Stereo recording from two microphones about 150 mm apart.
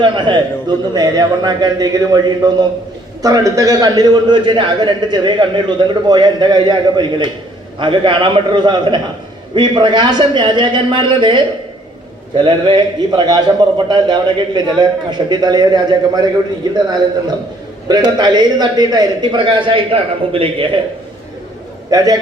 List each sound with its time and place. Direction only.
0.0 s a man's voice: 30° right (ahead or behind)
21.8 s a man's voice: 25° right (ahead or behind)